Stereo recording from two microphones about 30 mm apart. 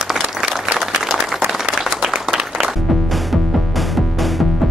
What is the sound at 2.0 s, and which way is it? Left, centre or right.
Applause, centre.